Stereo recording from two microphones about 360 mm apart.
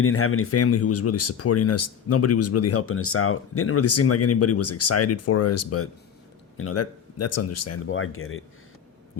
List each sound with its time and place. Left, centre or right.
0.0 s speech: left